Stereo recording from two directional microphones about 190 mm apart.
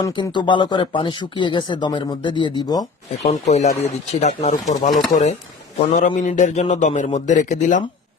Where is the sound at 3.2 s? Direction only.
35° left (ahead or behind).